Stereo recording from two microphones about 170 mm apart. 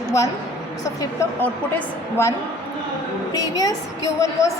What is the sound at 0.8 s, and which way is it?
A woman's voice, 15° left (ahead or behind).